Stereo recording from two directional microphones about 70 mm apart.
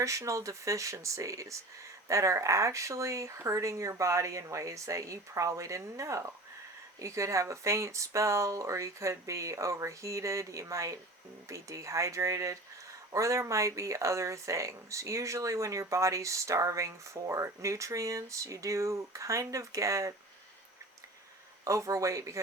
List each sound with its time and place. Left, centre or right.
0.0 s speech: right
21.6 s speech: right